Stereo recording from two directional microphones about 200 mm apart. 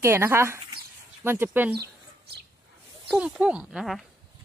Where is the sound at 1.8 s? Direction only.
55° right (ahead or behind).